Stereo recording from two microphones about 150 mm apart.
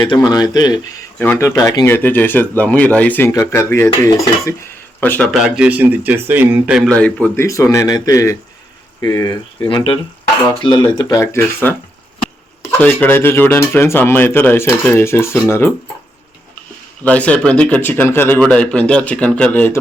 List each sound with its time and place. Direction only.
0.0 s speech: 25° left (ahead or behind)
5.3 s speech: 5° right (ahead or behind)
6.7 s speech: 5° left (ahead or behind)
7.4 s speech: 20° left (ahead or behind)
11.2 s speech: 20° left (ahead or behind)
12.8 s speech: 10° left (ahead or behind)
17.0 s speech: 10° left (ahead or behind)